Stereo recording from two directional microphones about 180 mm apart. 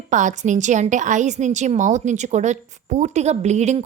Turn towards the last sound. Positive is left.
turn(degrees=-40)  # may be behind; listen again after turning